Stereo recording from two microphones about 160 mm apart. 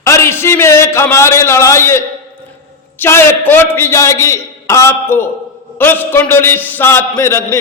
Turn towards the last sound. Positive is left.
turn(degrees=15)  # may be behind; listen again after turning